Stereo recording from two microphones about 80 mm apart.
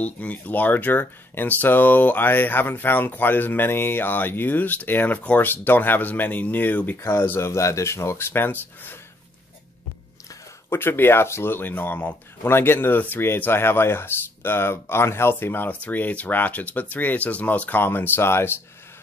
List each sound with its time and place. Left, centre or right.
0.0 s speech: centre
10.7 s speech: left